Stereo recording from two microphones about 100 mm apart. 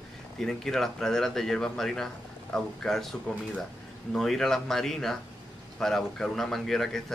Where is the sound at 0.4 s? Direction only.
5° left (ahead or behind).